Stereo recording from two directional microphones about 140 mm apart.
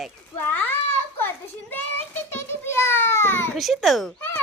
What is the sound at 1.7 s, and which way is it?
Child singing, 15° left (ahead or behind).